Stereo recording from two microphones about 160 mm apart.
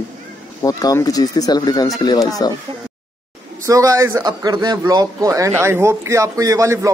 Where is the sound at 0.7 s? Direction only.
20° left (ahead or behind).